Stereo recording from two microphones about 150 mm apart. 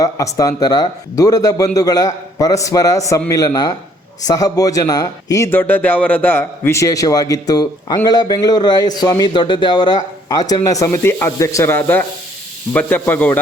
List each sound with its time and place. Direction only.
0.0 s speech: 25° left (ahead or behind)